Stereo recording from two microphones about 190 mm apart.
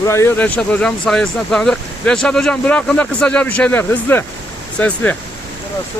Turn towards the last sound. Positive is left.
turn(degrees=10)  # may be behind; listen again after turning